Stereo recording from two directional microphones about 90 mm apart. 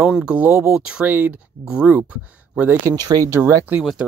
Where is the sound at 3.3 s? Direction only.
30° right (ahead or behind).